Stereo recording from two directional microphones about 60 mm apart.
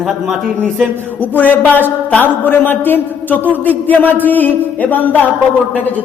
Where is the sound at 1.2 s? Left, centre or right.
Left.